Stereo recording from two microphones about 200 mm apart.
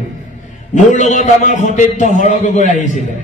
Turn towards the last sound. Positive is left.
turn(degrees=40)  # may be behind; listen again after turning